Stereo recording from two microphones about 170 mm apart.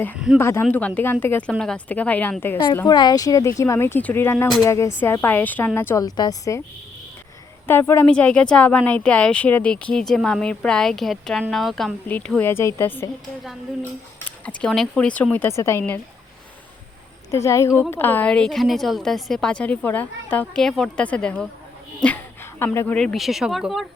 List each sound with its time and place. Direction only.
0.3 s a woman's voice: 15° left (ahead or behind)
2.8 s a woman's voice: 25° left (ahead or behind)
7.7 s a woman's voice: 15° left (ahead or behind)
13.2 s a woman's voice: centre (ahead or behind); by 16.0 s 15° left (ahead or behind)
17.3 s a woman's voice: 15° left (ahead or behind)
23.0 s a woman's voice: centre (ahead or behind)